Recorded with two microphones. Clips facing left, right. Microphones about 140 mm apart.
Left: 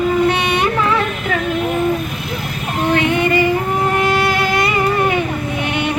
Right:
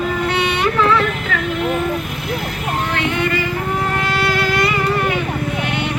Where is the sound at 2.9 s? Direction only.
15° left (ahead or behind).